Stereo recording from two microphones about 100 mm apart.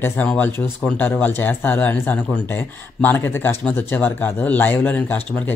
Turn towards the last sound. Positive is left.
turn(degrees=20)  # may be behind; listen again after turning